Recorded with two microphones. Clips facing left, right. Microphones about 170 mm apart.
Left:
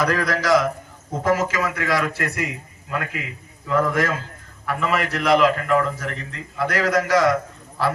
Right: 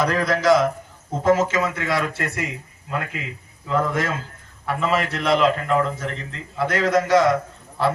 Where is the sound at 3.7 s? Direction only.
25° right (ahead or behind).